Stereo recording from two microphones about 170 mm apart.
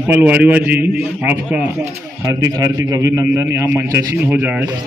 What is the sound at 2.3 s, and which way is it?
A man's voice, 20° right (ahead or behind).